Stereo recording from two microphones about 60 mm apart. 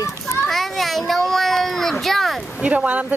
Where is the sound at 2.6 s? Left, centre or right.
Right.